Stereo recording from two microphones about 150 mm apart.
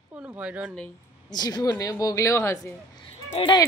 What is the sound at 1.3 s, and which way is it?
A woman's voice, 25° left (ahead or behind).